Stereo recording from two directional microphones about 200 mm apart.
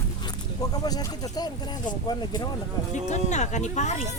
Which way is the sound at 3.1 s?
35° left (ahead or behind).